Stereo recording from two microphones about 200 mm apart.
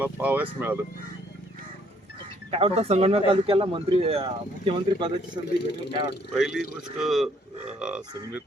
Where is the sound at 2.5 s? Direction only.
30° right (ahead or behind).